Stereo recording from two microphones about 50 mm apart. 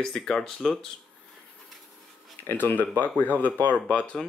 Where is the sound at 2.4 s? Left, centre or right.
Left.